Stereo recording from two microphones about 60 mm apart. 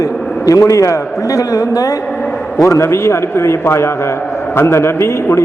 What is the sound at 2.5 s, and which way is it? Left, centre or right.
A man's voice, left.